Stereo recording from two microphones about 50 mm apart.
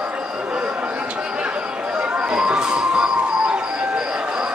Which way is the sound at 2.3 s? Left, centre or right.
Centre.